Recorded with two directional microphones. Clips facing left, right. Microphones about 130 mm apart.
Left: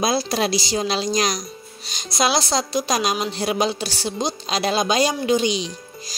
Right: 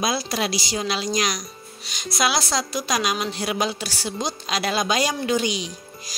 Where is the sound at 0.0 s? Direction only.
35° left (ahead or behind).